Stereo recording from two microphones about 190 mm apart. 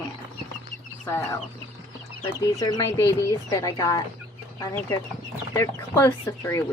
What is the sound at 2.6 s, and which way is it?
Speech, 20° left (ahead or behind).